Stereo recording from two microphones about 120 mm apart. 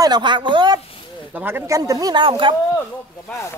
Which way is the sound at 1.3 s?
15° right (ahead or behind).